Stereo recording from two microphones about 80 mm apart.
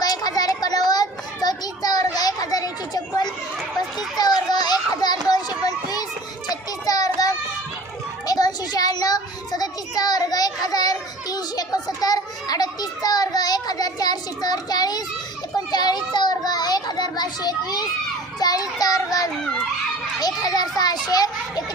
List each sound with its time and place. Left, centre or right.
0.0 s children playing: left
5.2 s a sound: left
6.5 s child singing: left
15.5 s a child's voice: left